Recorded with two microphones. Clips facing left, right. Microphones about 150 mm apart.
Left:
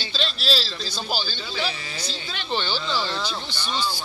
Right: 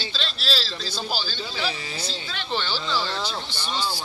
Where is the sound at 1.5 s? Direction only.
30° right (ahead or behind).